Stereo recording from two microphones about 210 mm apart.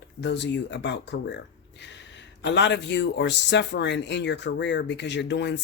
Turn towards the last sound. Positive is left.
turn(degrees=55)  # may be behind; listen again after turning